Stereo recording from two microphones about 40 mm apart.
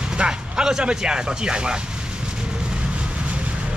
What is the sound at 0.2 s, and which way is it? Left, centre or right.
Speech, centre.